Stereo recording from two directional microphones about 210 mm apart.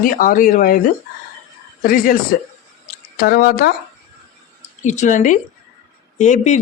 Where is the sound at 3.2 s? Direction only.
45° left (ahead or behind).